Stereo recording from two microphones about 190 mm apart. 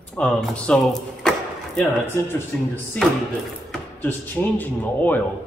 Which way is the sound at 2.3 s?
10° left (ahead or behind).